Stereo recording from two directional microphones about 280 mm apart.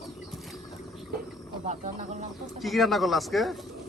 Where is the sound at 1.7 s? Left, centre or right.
Right.